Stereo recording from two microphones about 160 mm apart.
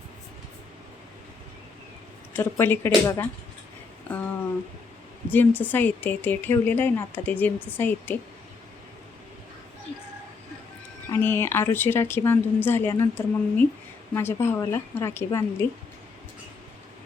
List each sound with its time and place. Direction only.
2.3 s speech: 15° left (ahead or behind)
5.3 s speech: 10° left (ahead or behind)
11.1 s speech: 15° left (ahead or behind)